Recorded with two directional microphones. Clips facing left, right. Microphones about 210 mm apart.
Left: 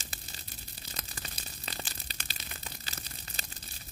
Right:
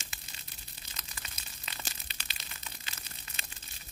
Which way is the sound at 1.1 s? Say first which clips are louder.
Left 5 dB; 35° left (ahead or behind).